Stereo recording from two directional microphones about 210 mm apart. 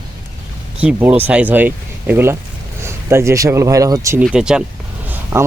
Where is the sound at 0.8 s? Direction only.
5° right (ahead or behind).